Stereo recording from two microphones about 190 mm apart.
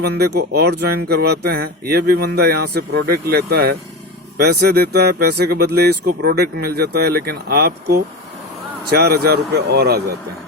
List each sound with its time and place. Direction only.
0.0 s speech: 55° right (ahead or behind)